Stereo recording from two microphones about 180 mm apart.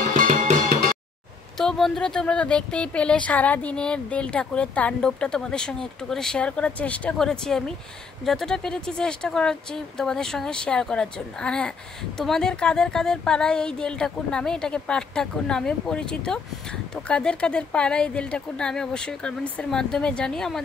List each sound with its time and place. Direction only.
0.0 s music: 45° right (ahead or behind)
1.6 s speech: centre (ahead or behind)